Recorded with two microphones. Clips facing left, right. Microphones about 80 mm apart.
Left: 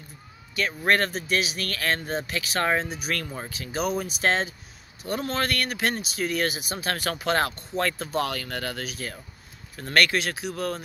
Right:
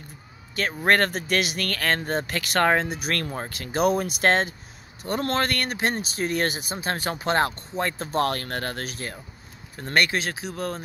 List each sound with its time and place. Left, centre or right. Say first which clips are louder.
0.6 s speech: right 2 dB; right
6.7 s speech: right 1 dB; right
9.8 s speech: left 1 dB; right